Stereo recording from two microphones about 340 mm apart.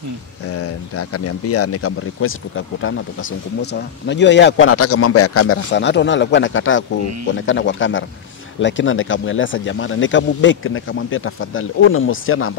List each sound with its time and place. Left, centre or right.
0.6 s speech: left